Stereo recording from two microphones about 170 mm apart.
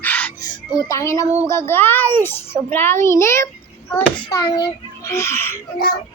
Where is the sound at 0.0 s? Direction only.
10° left (ahead or behind).